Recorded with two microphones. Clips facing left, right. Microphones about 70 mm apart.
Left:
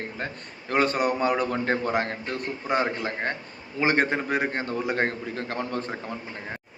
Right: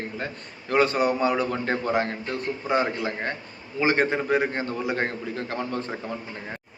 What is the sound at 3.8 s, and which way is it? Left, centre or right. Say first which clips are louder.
A man's voice: right 1 dB; left.